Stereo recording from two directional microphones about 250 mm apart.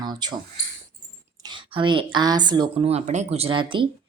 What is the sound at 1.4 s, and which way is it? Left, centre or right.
A woman's voice, centre.